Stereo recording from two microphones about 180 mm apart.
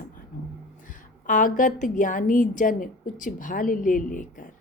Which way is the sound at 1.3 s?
45° left (ahead or behind).